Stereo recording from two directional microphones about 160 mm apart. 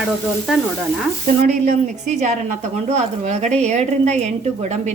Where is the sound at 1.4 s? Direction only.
45° right (ahead or behind).